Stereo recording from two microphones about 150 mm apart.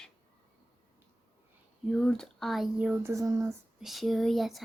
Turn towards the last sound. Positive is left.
turn(degrees=0)  # may be behind; listen again after turning